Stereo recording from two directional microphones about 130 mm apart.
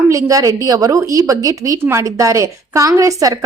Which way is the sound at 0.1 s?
25° right (ahead or behind).